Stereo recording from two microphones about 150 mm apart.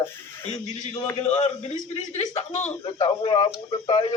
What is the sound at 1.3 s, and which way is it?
Speech, 45° left (ahead or behind).